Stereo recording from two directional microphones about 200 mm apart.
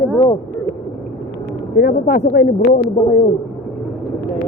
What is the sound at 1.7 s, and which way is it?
Speech, 50° left (ahead or behind).